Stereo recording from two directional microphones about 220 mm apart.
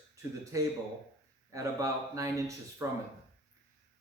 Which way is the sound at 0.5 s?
15° right (ahead or behind).